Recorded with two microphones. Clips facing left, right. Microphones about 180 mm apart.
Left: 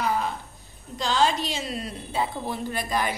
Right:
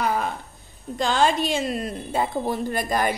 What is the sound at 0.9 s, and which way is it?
A woman's voice, 55° right (ahead or behind).